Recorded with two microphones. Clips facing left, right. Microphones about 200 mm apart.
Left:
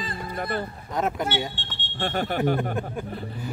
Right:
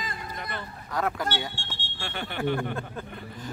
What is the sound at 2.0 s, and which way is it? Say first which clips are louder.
Speech: left 10 dB; 40° left (ahead or behind).